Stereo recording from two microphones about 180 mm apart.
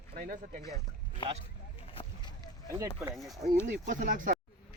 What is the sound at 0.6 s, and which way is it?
Speech, 20° left (ahead or behind).